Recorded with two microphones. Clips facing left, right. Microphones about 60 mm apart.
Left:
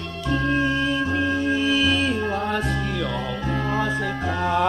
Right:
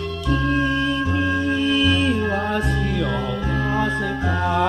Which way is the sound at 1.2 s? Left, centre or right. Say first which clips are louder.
Right 1 dB; centre.